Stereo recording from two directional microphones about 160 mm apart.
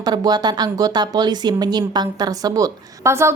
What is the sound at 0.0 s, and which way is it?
Speech, 25° right (ahead or behind).